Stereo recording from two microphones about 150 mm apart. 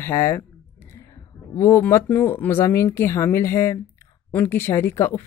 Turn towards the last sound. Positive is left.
turn(degrees=15)  # may be behind; listen again after turning